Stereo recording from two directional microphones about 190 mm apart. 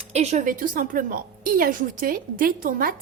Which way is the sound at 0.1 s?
35° right (ahead or behind).